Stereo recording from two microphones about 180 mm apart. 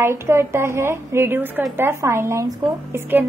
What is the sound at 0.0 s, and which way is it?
A woman's voice, 15° right (ahead or behind).